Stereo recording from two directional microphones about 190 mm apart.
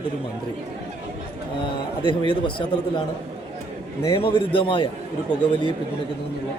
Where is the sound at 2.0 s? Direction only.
25° left (ahead or behind).